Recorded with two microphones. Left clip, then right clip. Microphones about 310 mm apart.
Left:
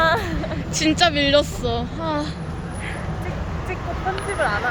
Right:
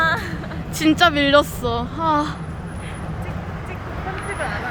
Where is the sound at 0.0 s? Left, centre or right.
Left.